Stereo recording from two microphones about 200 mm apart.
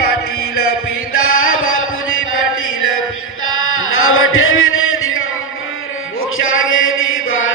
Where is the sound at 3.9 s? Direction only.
90° left.